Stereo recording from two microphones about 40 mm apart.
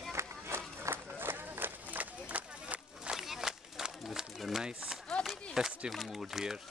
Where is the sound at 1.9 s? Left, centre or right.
Right.